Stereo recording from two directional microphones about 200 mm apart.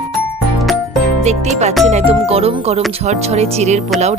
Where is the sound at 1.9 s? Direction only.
30° right (ahead or behind).